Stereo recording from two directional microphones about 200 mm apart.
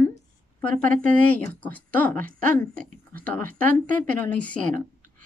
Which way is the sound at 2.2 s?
40° right (ahead or behind).